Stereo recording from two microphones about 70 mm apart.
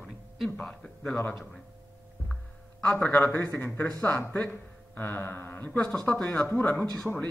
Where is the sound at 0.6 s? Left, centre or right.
Centre.